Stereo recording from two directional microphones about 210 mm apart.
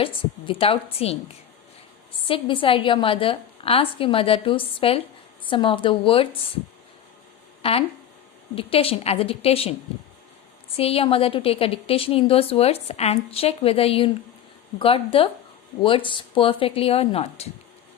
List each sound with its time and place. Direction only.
0.0 s a woman's voice: 25° left (ahead or behind)
2.2 s a woman's voice: 25° left (ahead or behind)
7.6 s a woman's voice: 25° left (ahead or behind)
10.8 s a woman's voice: 25° left (ahead or behind)